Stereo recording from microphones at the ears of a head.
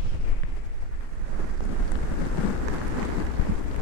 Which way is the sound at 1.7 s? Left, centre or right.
Left.